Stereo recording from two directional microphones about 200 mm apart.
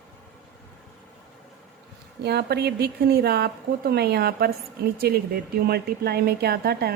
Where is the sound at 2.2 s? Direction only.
55° right (ahead or behind).